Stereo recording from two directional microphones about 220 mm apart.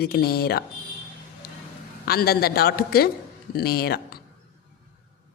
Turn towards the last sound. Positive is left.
turn(degrees=45)  # may be behind; listen again after turning